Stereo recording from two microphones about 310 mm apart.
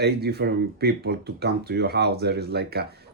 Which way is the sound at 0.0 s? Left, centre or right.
Right.